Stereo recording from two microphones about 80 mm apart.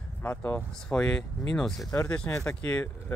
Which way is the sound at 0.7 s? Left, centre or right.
Centre.